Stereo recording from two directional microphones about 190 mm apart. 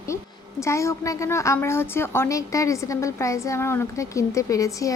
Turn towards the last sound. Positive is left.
turn(degrees=15)  # may be behind; listen again after turning